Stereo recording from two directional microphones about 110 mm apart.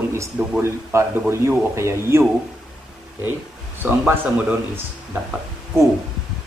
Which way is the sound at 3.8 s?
20° right (ahead or behind).